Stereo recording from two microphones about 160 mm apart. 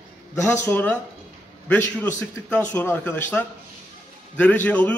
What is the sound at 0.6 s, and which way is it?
A man's voice, 10° left (ahead or behind).